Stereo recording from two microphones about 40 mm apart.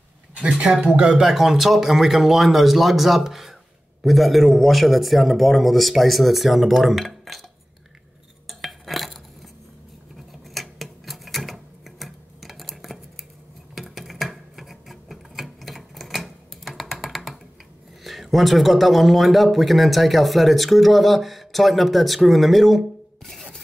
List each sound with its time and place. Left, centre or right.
0.4 s speech: right
1.2 s speech: centre
8.5 s cutlery: centre
10.5 s a sound: centre
18.0 s speech: centre